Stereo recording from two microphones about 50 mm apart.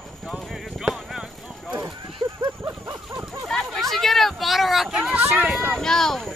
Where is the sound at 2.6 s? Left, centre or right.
Right.